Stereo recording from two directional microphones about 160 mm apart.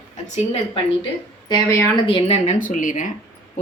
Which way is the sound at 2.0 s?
35° left (ahead or behind).